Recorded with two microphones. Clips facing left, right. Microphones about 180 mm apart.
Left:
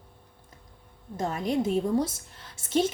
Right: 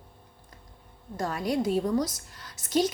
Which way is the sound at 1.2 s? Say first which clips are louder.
Left 1 dB; 25° left (ahead or behind).